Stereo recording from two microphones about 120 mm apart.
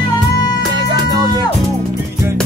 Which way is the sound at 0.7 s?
35° right (ahead or behind).